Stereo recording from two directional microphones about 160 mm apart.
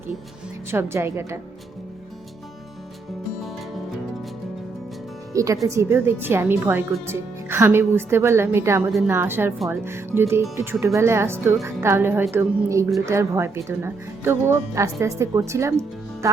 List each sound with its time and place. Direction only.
0.7 s a woman's voice: 15° right (ahead or behind)
5.3 s a woman's voice: 20° right (ahead or behind)